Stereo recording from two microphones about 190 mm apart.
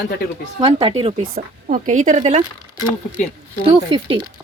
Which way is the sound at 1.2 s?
45° right (ahead or behind).